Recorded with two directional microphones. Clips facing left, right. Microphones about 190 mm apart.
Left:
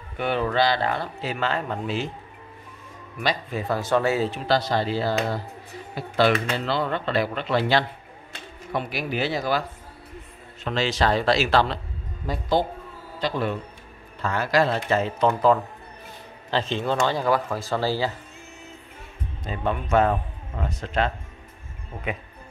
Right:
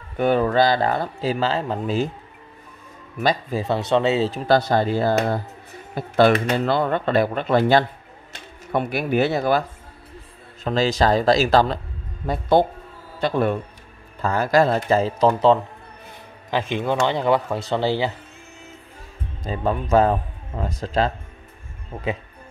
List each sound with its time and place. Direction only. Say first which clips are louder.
0.2 s speech: right 5 dB; 45° right (ahead or behind)
3.2 s speech: right 5 dB; 45° right (ahead or behind)
3.5 s speech: even; 25° right (ahead or behind)
4.5 s speech: right 6 dB; 50° right (ahead or behind)
10.6 s speech: right 4 dB; 40° right (ahead or behind)
12.3 s speech: right 5 dB; 55° right (ahead or behind)
14.2 s speech: right 4 dB; 40° right (ahead or behind)
16.4 s speech: right 2 dB; 15° right (ahead or behind)
19.5 s speech: right 4 dB; 35° right (ahead or behind)